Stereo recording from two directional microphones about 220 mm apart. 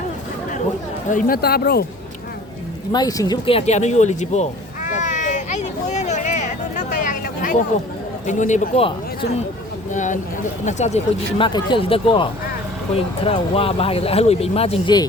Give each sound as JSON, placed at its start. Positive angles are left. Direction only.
{"t": 1.1, "sound": "speech", "side_deg": 45}
{"t": 2.9, "sound": "speech", "side_deg": 15}
{"t": 4.9, "sound": "a sound", "side_deg": 35}
{"t": 8.3, "sound": "speech", "side_deg": 35}
{"t": 9.9, "sound": "speech", "side_deg": 35}